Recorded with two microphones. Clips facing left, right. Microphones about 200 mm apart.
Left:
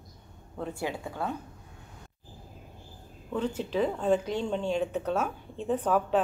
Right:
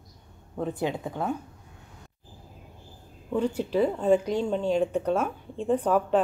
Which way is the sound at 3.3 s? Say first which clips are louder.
Right 4 dB; 10° right (ahead or behind).